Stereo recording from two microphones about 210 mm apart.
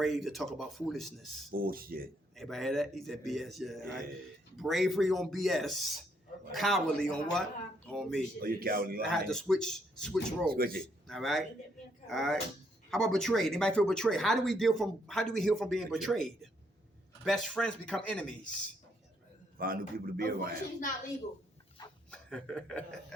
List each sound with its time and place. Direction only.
0.0 s speech: centre (ahead or behind)
1.5 s a man's voice: 45° right (ahead or behind)
2.3 s speech: centre (ahead or behind)
8.4 s a man's voice: 45° right (ahead or behind)
9.0 s speech: centre (ahead or behind)
10.5 s a man's voice: 45° right (ahead or behind)
11.1 s speech: centre (ahead or behind)
19.5 s a man's voice: 45° right (ahead or behind)
22.1 s speech: 5° left (ahead or behind)